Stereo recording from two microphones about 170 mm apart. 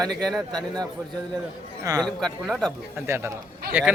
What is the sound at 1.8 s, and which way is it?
Speech, 20° right (ahead or behind).